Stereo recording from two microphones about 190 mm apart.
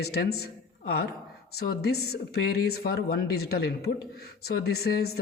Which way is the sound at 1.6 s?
55° left (ahead or behind).